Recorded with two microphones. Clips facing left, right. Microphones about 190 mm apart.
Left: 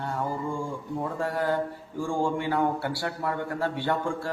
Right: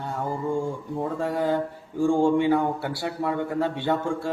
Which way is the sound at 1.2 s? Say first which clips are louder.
Right 2 dB; 20° right (ahead or behind).